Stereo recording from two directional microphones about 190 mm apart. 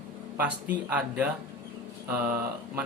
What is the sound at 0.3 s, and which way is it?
Speech, 10° right (ahead or behind).